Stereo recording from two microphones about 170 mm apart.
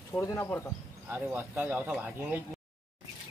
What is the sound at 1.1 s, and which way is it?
Speech, 15° right (ahead or behind).